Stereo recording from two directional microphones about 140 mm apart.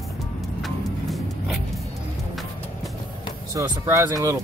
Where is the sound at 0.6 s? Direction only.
Centre (ahead or behind).